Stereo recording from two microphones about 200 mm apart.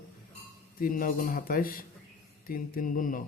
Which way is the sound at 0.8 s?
45° left (ahead or behind).